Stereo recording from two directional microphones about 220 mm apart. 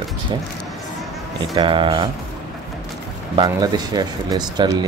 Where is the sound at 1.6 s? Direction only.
25° right (ahead or behind).